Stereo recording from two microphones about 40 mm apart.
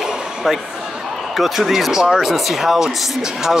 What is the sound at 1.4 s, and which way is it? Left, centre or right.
Speech, centre.